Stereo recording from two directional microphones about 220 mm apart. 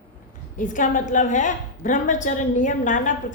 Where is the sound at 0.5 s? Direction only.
35° left (ahead or behind).